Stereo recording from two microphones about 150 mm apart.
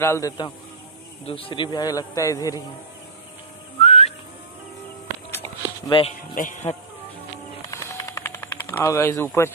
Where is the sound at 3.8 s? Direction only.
45° left (ahead or behind).